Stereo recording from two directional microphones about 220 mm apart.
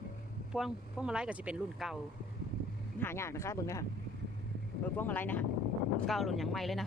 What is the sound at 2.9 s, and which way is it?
Speech, 10° left (ahead or behind).